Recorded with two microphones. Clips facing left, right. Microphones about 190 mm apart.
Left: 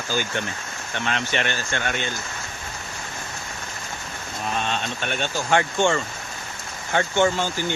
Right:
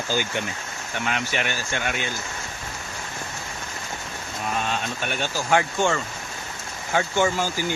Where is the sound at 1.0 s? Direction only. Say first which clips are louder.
Left 1 dB; 10° right (ahead or behind).